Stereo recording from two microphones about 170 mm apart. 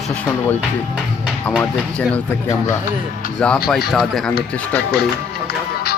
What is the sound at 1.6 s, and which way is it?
Speech, 10° left (ahead or behind).